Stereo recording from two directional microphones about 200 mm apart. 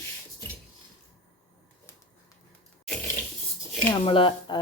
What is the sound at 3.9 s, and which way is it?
Speech, 25° left (ahead or behind).